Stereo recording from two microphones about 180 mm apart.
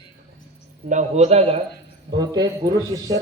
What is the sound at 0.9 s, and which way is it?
Speech, 40° right (ahead or behind).